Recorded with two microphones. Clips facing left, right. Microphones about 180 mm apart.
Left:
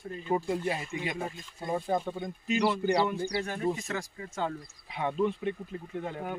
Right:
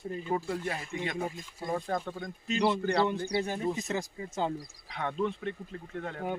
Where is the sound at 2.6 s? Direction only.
30° right (ahead or behind).